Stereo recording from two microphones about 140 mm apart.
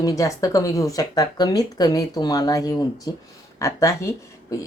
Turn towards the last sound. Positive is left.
turn(degrees=20)  # may be behind; listen again after turning